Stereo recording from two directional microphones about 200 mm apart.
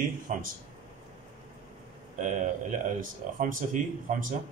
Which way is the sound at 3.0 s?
40° right (ahead or behind).